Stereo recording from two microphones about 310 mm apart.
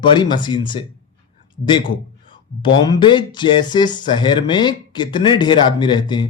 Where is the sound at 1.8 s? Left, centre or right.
Centre.